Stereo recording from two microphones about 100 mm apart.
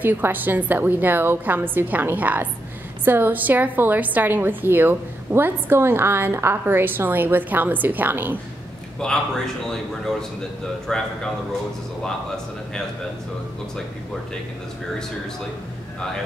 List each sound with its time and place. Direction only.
0.0 s a woman's voice: 20° right (ahead or behind)
9.0 s a man's voice: 5° left (ahead or behind)